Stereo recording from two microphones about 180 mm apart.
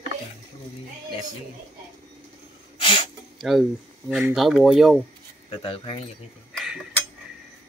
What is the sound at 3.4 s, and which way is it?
Speech, centre (ahead or behind).